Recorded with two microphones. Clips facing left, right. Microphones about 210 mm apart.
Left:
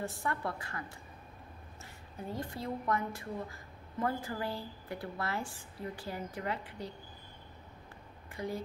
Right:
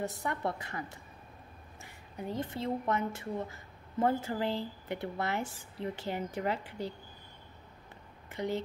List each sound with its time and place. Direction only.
0.2 s speech: 20° right (ahead or behind)
2.3 s speech: 25° right (ahead or behind)
8.3 s speech: 25° right (ahead or behind)